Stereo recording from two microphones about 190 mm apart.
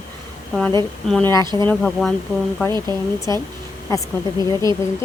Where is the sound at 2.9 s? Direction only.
15° left (ahead or behind).